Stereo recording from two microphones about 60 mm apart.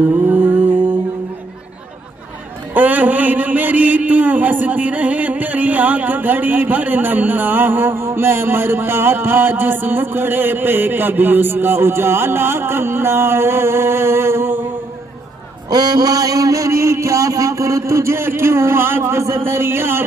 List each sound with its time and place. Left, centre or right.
0.2 s mantra: right
2.7 s a man's voice: right
15.7 s a sound: right